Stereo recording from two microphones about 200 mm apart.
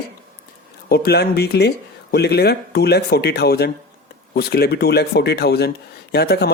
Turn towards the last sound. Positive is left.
turn(degrees=55)  # may be behind; listen again after turning